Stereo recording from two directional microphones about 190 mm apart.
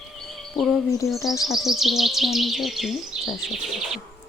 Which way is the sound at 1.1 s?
Centre (ahead or behind).